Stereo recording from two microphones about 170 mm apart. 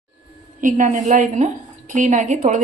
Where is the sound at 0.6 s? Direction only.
50° right (ahead or behind).